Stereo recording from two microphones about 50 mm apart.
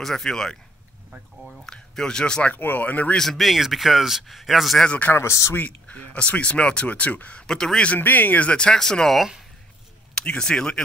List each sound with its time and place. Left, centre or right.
0.0 s speech: centre
2.5 s speech: left
3.2 s speech: centre
4.8 s speech: left
5.1 s speech: left
5.7 s speech: left
7.4 s speech: centre
7.9 s speech: left
8.5 s speech: left
8.7 s speech: centre